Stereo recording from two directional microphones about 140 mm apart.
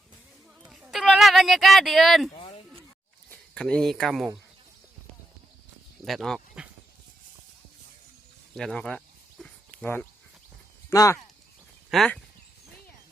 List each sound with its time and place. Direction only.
0.6 s a sound: 5° right (ahead or behind)
3.5 s speech: 5° left (ahead or behind)
6.1 s speech: centre (ahead or behind)
8.5 s a sound: 5° left (ahead or behind)
9.8 s speech: 15° left (ahead or behind)
11.9 s speech: 5° left (ahead or behind)